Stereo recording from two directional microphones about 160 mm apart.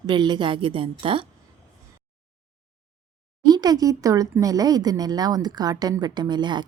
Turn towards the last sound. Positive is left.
turn(degrees=-30)  # may be behind; listen again after turning